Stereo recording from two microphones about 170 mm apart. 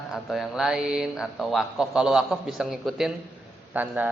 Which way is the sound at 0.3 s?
Centre (ahead or behind).